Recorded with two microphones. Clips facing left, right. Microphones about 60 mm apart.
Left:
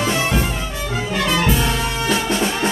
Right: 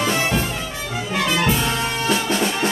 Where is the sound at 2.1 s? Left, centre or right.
Centre.